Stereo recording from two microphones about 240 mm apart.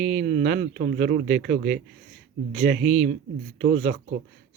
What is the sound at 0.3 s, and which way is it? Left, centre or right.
Speech, right.